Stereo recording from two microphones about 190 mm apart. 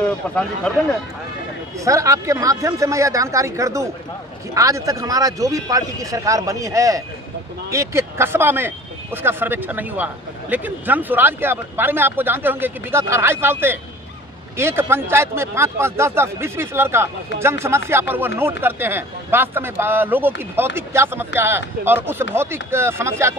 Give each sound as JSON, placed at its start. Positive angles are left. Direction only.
{"t": 0.7, "sound": "speech", "side_deg": 5}
{"t": 1.9, "sound": "speech", "side_deg": -15}